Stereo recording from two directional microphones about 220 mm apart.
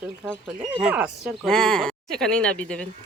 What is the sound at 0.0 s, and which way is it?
Speech, 10° right (ahead or behind).